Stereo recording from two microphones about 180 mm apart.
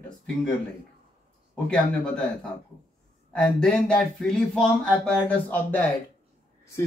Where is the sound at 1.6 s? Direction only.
5° left (ahead or behind).